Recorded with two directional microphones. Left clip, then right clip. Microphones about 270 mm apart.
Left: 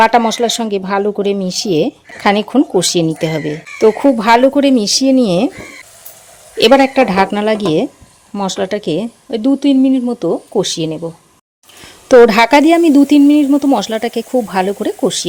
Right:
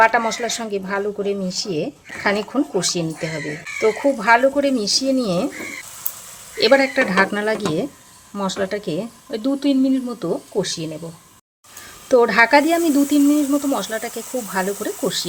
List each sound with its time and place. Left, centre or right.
0.0 s speech: left
6.6 s speech: left
12.0 s speech: left